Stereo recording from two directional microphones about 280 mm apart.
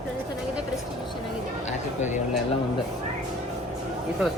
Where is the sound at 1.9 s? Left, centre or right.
Left.